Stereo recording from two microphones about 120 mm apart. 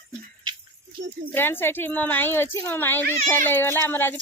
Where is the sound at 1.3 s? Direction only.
20° left (ahead or behind).